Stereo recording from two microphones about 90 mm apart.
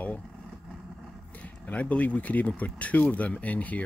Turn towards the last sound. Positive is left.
turn(degrees=15)  # may be behind; listen again after turning